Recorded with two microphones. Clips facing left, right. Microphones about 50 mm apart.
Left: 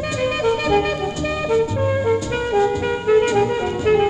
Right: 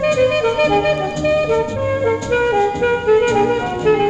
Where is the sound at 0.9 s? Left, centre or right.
Right.